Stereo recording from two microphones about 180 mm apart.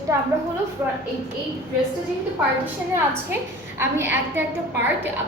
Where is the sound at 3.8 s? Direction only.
10° right (ahead or behind).